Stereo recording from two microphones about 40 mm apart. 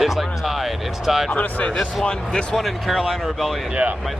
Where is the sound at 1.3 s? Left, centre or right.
Left.